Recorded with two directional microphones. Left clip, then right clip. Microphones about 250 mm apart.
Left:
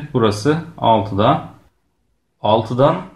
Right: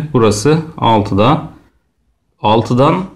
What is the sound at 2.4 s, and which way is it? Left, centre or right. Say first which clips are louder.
Speech: right 3 dB; right.